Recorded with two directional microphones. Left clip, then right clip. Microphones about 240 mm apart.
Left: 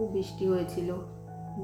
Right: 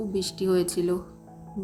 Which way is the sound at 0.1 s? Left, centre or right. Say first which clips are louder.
Right 3 dB; right.